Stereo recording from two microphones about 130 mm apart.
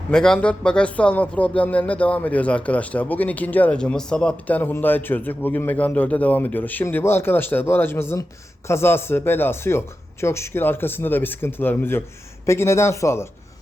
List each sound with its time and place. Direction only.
0.1 s a man's voice: 5° left (ahead or behind); by 13.2 s 20° left (ahead or behind)